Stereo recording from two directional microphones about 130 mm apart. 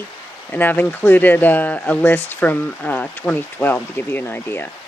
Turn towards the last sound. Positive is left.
turn(degrees=15)  # may be behind; listen again after turning